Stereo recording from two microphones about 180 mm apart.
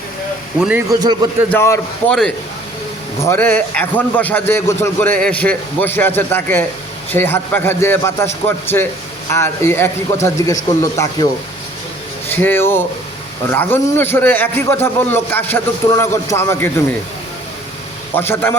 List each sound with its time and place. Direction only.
0.9 s a man's voice: 20° right (ahead or behind)
1.5 s a man's voice: 15° left (ahead or behind)
3.2 s a man's voice: 15° left (ahead or behind)
12.3 s a man's voice: 10° left (ahead or behind)
18.1 s a man's voice: 10° left (ahead or behind)